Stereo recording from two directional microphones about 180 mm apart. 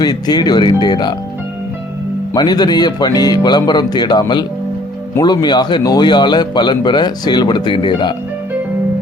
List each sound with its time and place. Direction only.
0.0 s speech: 20° left (ahead or behind)
2.3 s speech: 20° left (ahead or behind)